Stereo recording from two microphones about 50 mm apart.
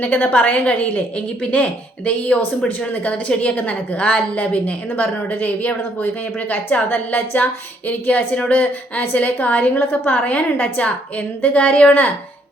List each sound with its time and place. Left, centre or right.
0.0 s a woman's voice: left